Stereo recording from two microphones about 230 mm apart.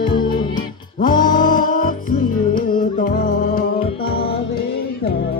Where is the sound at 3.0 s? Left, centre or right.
Left.